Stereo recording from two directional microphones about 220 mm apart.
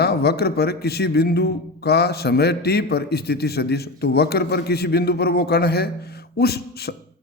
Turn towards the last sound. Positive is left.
turn(degrees=45)  # may be behind; listen again after turning